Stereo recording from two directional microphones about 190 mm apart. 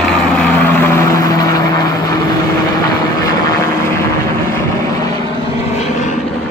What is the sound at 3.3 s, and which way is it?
Vehicle, 15° left (ahead or behind).